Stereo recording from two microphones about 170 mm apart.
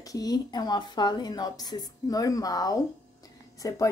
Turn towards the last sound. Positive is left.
turn(degrees=20)  # may be behind; listen again after turning